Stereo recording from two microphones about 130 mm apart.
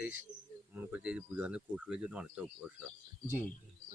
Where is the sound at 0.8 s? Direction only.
10° right (ahead or behind).